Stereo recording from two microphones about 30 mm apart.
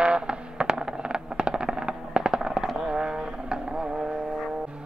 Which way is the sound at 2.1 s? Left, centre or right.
Right.